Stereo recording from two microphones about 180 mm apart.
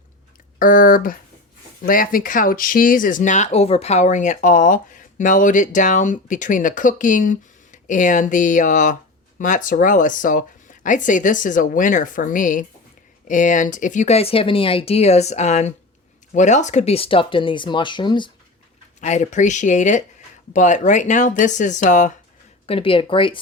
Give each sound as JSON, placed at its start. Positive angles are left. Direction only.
{"t": 0.6, "sound": "speech", "side_deg": 50}
{"t": 18.9, "sound": "speech", "side_deg": 40}
{"t": 22.6, "sound": "speech", "side_deg": 30}